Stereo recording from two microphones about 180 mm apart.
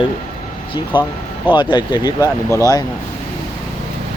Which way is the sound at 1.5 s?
25° left (ahead or behind).